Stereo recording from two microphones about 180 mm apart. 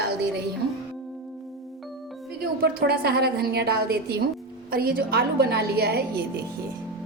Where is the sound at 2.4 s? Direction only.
55° right (ahead or behind).